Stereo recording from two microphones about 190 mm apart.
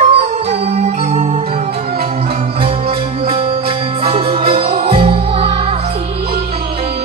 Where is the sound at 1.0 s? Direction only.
35° right (ahead or behind).